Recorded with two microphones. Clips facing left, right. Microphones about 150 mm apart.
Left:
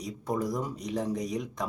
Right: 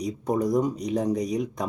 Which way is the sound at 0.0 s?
20° right (ahead or behind).